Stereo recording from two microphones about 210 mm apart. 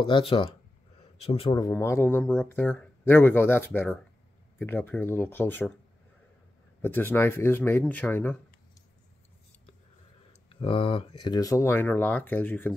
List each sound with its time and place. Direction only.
1.2 s a man's voice: 25° left (ahead or behind)
1.7 s speech: 10° left (ahead or behind)
6.8 s speech: 10° left (ahead or behind)
10.5 s speech: 25° left (ahead or behind); by 12.7 s 10° left (ahead or behind)